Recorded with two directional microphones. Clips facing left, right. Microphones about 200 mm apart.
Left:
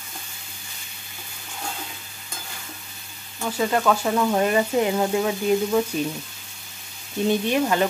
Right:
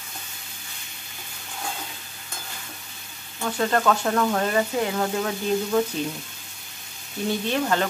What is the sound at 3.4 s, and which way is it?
Speech, 5° left (ahead or behind).